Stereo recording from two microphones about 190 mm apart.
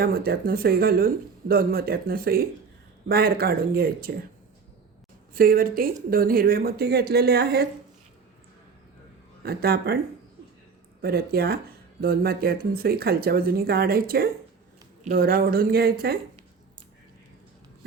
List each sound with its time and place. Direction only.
0.0 s speech: 50° right (ahead or behind)
5.3 s speech: 50° right (ahead or behind)
9.4 s speech: 55° right (ahead or behind)
11.0 s speech: 55° right (ahead or behind)